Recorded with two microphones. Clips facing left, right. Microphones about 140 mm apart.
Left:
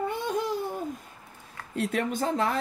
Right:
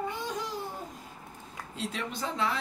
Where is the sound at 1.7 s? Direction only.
55° left (ahead or behind).